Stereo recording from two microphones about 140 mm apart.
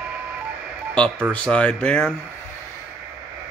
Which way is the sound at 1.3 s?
10° left (ahead or behind).